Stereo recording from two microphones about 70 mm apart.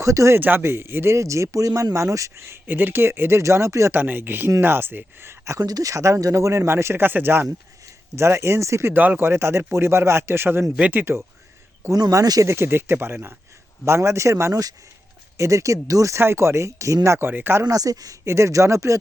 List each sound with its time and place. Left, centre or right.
0.0 s speech: right
0.3 s speech: right
3.9 s speech: right
5.5 s speech: right
8.9 s speech: right
10.8 s speech: centre
11.8 s speech: right
12.2 s speech: right
12.5 s speech: right
16.2 s speech: right
17.7 s speech: right
18.3 s speech: right